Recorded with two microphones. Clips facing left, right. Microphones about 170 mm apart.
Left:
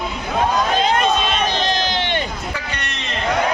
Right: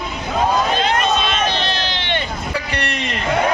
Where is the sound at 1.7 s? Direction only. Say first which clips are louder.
Left 2 dB; 40° left (ahead or behind).